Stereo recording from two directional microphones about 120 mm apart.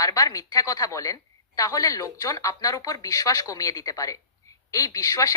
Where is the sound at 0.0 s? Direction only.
30° left (ahead or behind).